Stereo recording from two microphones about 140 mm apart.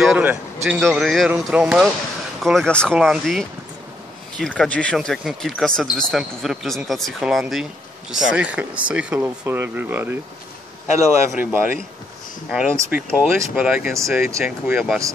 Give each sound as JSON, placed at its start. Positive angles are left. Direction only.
{"t": 0.0, "sound": "speech", "side_deg": -10}
{"t": 1.3, "sound": "speech", "side_deg": -10}
{"t": 2.4, "sound": "speech", "side_deg": 5}
{"t": 11.2, "sound": "speech", "side_deg": -15}
{"t": 12.9, "sound": "speech", "side_deg": -5}